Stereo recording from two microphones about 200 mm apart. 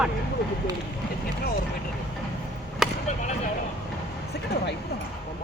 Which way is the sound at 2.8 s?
Centre (ahead or behind).